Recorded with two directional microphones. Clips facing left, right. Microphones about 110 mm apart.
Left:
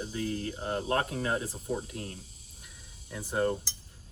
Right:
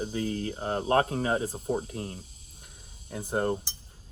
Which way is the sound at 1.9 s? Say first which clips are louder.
Right 4 dB; 30° right (ahead or behind).